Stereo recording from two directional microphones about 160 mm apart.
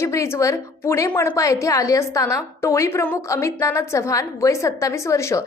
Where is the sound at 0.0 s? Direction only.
15° left (ahead or behind).